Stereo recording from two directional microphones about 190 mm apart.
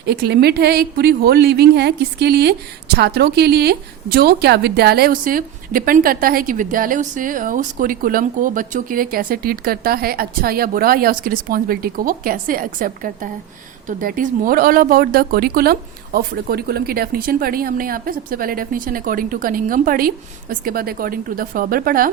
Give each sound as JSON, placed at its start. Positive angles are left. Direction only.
{"t": 0.0, "sound": "a woman's voice", "side_deg": -60}